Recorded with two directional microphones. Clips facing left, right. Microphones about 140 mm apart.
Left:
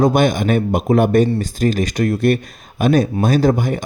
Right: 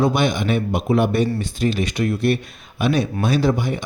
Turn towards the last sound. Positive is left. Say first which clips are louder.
# left 4 dB
turn(degrees=45)  # may be behind; listen again after turning